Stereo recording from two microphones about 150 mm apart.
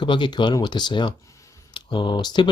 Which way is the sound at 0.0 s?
30° left (ahead or behind).